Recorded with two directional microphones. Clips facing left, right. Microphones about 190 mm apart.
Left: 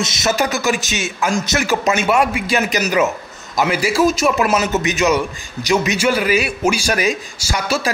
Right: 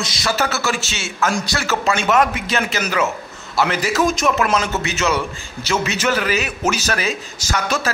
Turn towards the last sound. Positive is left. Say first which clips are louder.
# left 1 dB
turn(degrees=10)  # may be behind; listen again after turning